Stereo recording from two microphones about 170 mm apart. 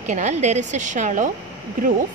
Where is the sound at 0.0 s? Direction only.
45° right (ahead or behind).